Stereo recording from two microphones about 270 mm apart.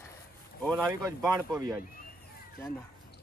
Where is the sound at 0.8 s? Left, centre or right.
Centre.